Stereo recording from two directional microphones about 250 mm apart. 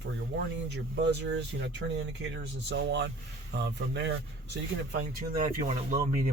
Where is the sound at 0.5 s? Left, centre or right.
Right.